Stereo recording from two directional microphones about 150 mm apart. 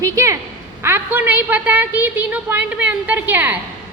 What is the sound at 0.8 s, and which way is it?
A woman's voice, 15° right (ahead or behind).